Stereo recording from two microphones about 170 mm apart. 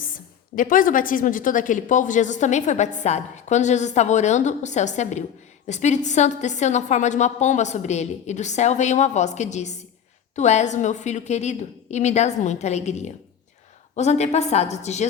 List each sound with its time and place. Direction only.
0.0 s a woman's voice: 55° left (ahead or behind)